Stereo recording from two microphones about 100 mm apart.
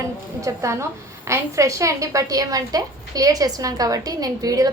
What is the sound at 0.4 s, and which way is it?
A woman's voice, 30° right (ahead or behind).